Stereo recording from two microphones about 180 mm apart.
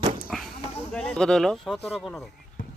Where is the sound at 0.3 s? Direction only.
Centre (ahead or behind).